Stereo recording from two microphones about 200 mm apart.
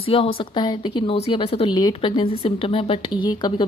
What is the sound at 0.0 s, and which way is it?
Speech, 25° left (ahead or behind).